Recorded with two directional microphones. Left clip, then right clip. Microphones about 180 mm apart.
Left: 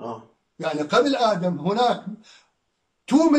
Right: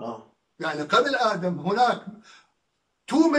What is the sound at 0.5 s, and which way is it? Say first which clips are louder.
A man's voice: left 2 dB; 15° left (ahead or behind).